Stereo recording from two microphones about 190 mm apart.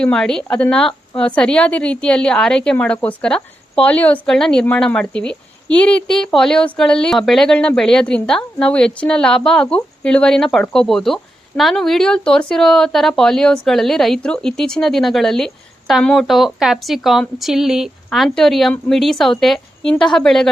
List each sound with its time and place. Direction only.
0.0 s speech: 5° left (ahead or behind)